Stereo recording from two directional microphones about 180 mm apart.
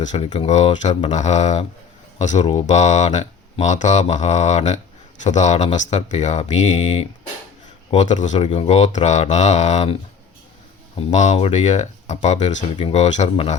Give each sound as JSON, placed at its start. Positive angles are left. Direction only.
{"t": 0.0, "sound": "speech", "side_deg": 40}